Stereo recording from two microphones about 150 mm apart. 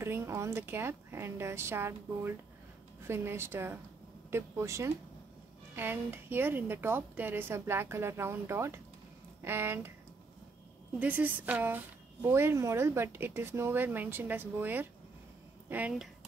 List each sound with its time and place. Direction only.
0.0 s speech: 15° right (ahead or behind)
11.0 s speech: 10° right (ahead or behind)